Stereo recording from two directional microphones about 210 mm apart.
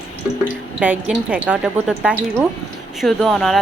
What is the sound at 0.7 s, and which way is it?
Speech, 5° right (ahead or behind).